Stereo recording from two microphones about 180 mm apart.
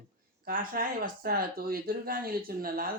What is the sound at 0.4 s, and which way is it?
Speech, 55° right (ahead or behind).